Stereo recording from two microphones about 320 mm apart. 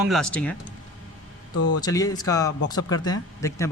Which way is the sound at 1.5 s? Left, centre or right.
Left.